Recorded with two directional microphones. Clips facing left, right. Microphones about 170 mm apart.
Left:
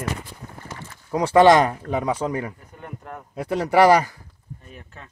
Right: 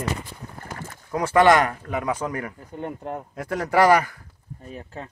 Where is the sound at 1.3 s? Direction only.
30° left (ahead or behind).